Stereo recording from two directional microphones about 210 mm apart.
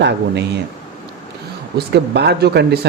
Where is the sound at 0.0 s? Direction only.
55° right (ahead or behind).